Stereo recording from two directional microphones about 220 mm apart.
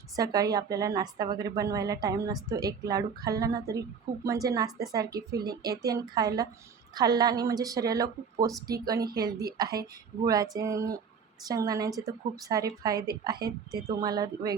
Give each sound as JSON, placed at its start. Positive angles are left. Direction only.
{"t": 0.2, "sound": "speech", "side_deg": -15}